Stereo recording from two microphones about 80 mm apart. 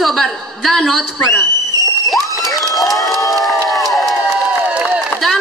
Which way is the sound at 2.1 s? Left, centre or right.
Centre.